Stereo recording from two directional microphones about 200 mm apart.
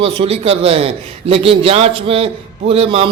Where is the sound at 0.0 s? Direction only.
30° right (ahead or behind).